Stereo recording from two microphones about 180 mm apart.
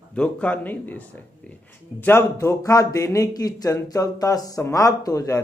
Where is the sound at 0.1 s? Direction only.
5° left (ahead or behind).